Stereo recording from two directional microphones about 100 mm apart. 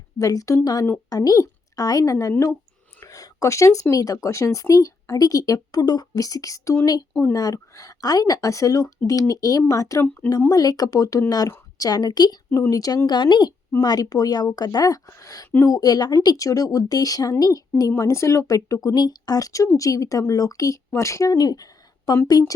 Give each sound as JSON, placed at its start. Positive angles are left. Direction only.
{"t": 0.2, "sound": "a woman's voice", "side_deg": 35}
{"t": 13.1, "sound": "a woman's voice", "side_deg": 50}